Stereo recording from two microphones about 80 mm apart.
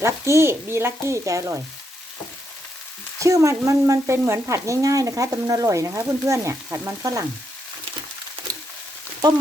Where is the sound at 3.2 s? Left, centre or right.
Right.